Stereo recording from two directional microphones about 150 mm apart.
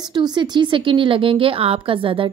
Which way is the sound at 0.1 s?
30° right (ahead or behind).